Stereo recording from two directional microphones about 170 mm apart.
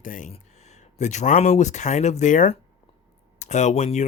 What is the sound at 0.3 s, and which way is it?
Speech, 40° left (ahead or behind).